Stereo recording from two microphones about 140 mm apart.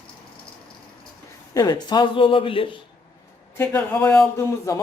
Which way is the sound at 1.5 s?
30° left (ahead or behind).